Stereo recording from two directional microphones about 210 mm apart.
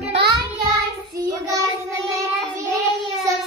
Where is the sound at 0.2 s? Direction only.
50° right (ahead or behind).